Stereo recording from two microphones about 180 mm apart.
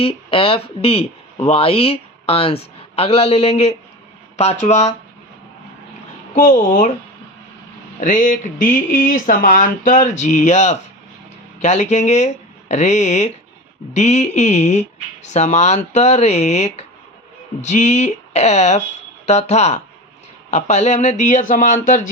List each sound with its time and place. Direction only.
0.0 s speech: 30° left (ahead or behind)
6.3 s speech: 45° left (ahead or behind)
7.9 s speech: 45° left (ahead or behind)